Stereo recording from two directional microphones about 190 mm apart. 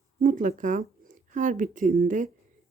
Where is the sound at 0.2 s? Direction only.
45° right (ahead or behind).